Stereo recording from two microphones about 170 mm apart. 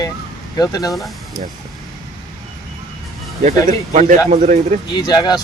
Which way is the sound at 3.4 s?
45° right (ahead or behind).